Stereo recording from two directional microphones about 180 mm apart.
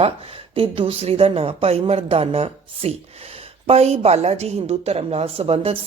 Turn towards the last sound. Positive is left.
turn(degrees=-35)  # may be behind; listen again after turning